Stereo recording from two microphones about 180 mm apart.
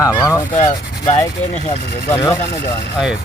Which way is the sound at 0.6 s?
35° left (ahead or behind).